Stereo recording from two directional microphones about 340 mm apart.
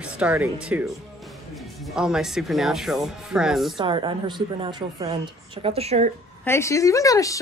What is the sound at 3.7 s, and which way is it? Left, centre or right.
Speech, centre.